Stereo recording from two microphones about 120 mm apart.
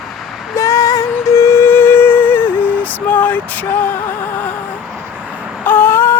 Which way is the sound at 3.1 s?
15° left (ahead or behind).